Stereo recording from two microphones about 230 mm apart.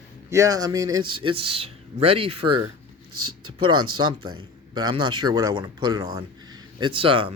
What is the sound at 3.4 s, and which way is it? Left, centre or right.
Speech, right.